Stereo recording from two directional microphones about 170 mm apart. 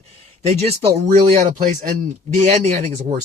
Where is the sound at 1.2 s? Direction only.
45° right (ahead or behind).